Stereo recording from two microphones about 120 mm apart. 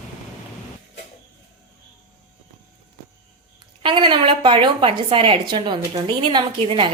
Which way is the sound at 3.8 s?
40° right (ahead or behind).